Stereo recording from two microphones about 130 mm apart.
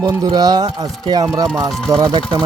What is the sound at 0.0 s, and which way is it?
Speech, 30° right (ahead or behind).